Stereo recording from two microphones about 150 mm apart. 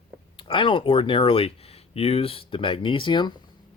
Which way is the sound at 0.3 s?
35° left (ahead or behind).